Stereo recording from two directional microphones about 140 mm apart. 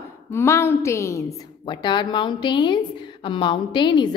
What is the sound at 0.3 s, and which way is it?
Speech, 20° left (ahead or behind).